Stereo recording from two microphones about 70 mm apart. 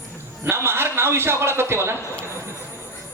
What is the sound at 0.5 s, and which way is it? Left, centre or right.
A man's voice, right.